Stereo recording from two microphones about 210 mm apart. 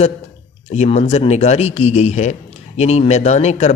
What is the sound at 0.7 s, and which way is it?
A man's voice, 30° left (ahead or behind).